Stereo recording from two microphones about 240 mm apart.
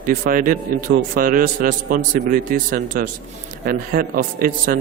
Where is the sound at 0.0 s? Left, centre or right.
Right.